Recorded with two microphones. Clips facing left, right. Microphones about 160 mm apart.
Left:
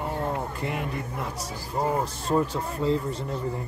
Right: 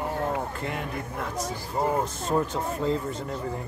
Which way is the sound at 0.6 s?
5° left (ahead or behind).